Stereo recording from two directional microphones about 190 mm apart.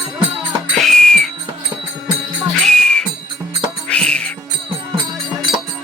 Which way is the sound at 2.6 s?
5° left (ahead or behind).